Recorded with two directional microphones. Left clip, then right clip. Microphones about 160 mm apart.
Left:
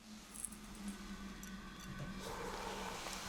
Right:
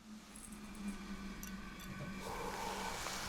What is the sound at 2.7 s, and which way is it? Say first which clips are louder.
Vehicle: right 3 dB; 15° right (ahead or behind).